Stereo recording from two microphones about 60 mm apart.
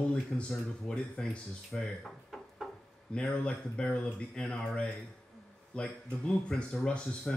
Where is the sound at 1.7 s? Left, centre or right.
Centre.